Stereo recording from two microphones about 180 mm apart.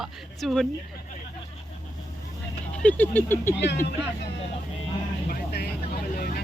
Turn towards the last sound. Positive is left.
turn(degrees=55)  # may be behind; listen again after turning